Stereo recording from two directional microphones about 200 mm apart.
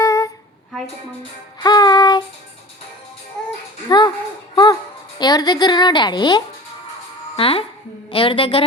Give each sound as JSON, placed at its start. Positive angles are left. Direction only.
{"t": 0.0, "sound": "humming", "side_deg": 15}
{"t": 1.6, "sound": "music", "side_deg": 20}
{"t": 3.8, "sound": "a sound", "side_deg": 20}
{"t": 4.5, "sound": "music", "side_deg": 20}
{"t": 5.2, "sound": "a woman's voice", "side_deg": 20}